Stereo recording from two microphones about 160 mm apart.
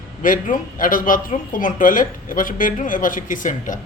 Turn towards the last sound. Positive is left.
turn(degrees=55)  # may be behind; listen again after turning